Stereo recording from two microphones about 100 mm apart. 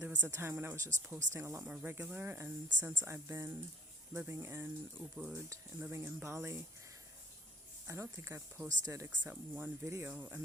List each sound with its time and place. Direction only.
0.0 s speech: 25° right (ahead or behind)
1.6 s speech: 15° right (ahead or behind)
8.1 s speech: 25° right (ahead or behind)
9.2 s speech: 15° right (ahead or behind)